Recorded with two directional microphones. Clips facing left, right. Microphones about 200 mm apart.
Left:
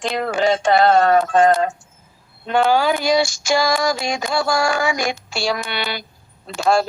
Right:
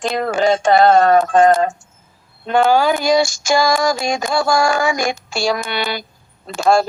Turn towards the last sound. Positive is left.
turn(degrees=-45)  # may be behind; listen again after turning